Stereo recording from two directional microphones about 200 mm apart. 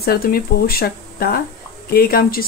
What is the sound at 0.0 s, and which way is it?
Speech, 50° left (ahead or behind).